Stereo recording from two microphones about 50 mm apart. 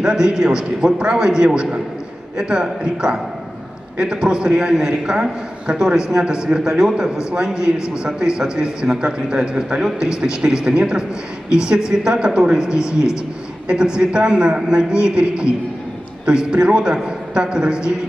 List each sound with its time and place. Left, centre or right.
0.0 s a man's voice: centre